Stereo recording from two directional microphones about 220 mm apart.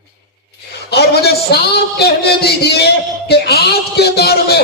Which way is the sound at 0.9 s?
45° left (ahead or behind).